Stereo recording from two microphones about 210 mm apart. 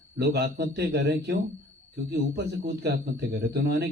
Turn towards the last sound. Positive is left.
turn(degrees=-50)  # may be behind; listen again after turning